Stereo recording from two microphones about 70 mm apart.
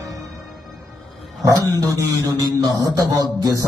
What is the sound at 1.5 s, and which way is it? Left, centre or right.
Speech, right.